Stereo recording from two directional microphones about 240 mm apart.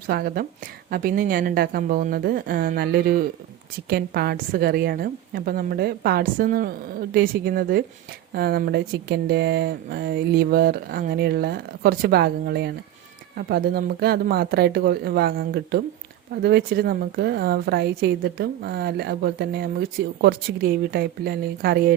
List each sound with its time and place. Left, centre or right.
0.1 s speech: right